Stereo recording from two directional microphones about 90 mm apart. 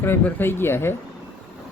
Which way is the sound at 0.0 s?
25° left (ahead or behind).